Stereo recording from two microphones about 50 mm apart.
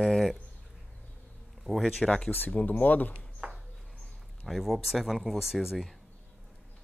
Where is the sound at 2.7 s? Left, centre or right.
Left.